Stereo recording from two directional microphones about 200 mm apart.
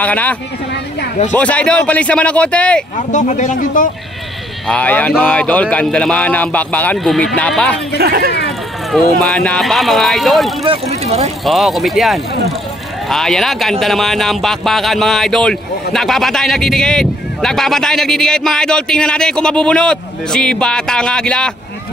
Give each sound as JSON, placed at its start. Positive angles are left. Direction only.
{"t": 0.0, "sound": "speech", "side_deg": 5}
{"t": 3.1, "sound": "speech", "side_deg": 40}
{"t": 4.6, "sound": "speech", "side_deg": 5}
{"t": 8.0, "sound": "speech", "side_deg": -50}
{"t": 8.9, "sound": "speech", "side_deg": 5}
{"t": 10.6, "sound": "speech", "side_deg": -30}
{"t": 11.4, "sound": "speech", "side_deg": 0}